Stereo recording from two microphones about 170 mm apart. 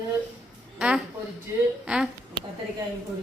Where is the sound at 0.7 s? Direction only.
5° right (ahead or behind).